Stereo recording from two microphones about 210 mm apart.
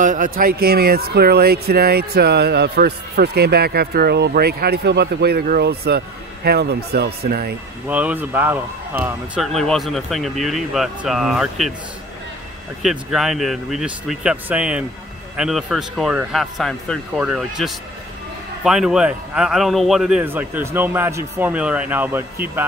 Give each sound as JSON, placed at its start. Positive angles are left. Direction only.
{"t": 0.0, "sound": "speech", "side_deg": -40}
{"t": 7.9, "sound": "a man's voice", "side_deg": -5}
{"t": 12.8, "sound": "a man's voice", "side_deg": 0}